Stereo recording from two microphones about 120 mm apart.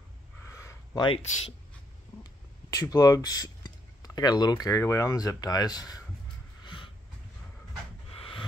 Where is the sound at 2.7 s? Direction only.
30° left (ahead or behind).